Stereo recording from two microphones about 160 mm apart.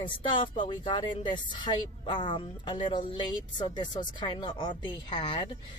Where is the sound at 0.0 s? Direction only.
30° left (ahead or behind).